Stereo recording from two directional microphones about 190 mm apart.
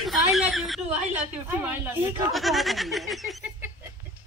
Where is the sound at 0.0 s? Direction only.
Centre (ahead or behind).